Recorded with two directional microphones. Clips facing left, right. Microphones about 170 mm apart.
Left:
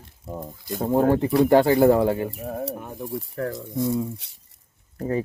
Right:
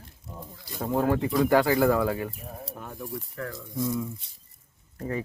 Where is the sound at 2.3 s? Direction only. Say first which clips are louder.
Left 10 dB; 70° left (ahead or behind).